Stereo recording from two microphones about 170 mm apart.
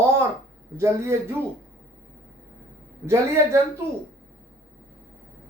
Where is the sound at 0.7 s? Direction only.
15° right (ahead or behind).